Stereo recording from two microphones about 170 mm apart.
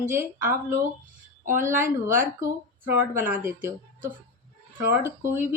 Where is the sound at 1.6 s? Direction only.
15° right (ahead or behind).